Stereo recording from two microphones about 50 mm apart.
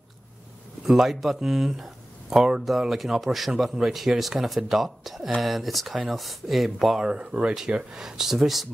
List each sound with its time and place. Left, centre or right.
0.8 s speech: centre
7.0 s speech: centre
7.7 s speech: centre